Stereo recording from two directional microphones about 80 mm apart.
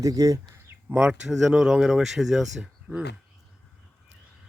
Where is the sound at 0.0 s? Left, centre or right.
Right.